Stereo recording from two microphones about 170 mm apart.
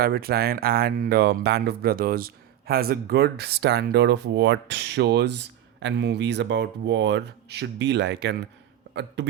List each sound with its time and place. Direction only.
0.0 s speech: 65° right (ahead or behind)
8.9 s speech: 90° right